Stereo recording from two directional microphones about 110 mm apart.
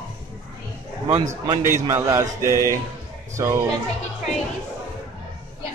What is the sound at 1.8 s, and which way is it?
Speech, 25° right (ahead or behind).